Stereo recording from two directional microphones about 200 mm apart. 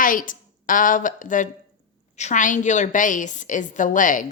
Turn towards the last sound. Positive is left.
turn(degrees=40)  # may be behind; listen again after turning